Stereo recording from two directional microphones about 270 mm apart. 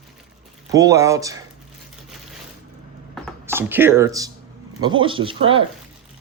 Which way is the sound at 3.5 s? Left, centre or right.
Centre.